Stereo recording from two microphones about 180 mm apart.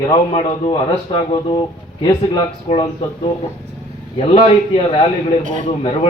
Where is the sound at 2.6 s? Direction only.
35° left (ahead or behind).